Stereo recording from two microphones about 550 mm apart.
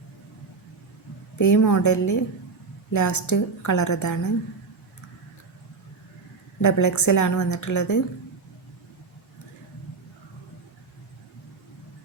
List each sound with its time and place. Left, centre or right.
1.4 s a woman's voice: left
6.6 s a woman's voice: left